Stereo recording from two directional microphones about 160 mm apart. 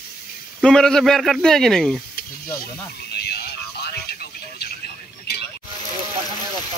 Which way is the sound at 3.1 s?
85° left.